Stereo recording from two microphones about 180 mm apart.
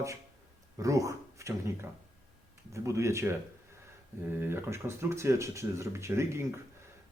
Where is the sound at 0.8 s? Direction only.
20° right (ahead or behind).